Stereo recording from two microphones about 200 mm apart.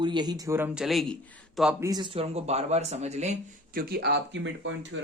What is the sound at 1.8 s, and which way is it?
Speech, 20° right (ahead or behind).